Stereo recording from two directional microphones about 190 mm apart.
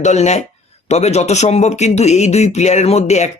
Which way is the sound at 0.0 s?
35° left (ahead or behind).